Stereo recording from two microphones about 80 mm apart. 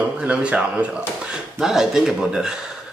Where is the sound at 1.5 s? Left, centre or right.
Centre.